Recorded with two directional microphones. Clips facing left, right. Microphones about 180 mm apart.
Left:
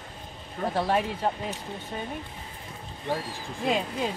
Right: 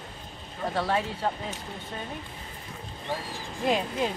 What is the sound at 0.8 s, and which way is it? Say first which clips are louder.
Speech: left 2 dB; 15° left (ahead or behind).